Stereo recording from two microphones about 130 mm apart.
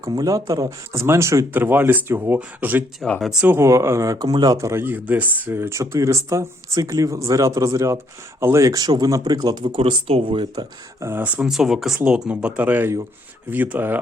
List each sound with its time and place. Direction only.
0.0 s speech: 30° right (ahead or behind)
3.0 s speech: centre (ahead or behind)
3.4 s speech: 20° right (ahead or behind); by 10.7 s 35° right (ahead or behind)
11.0 s speech: 15° right (ahead or behind)